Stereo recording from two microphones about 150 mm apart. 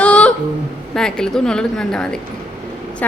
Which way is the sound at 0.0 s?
10° left (ahead or behind).